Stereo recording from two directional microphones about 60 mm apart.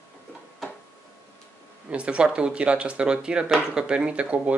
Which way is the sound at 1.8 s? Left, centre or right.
Centre.